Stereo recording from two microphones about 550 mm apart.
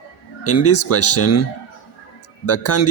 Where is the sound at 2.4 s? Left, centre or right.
Left.